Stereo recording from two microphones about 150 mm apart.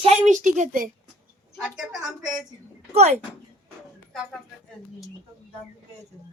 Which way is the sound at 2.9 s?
45° right (ahead or behind).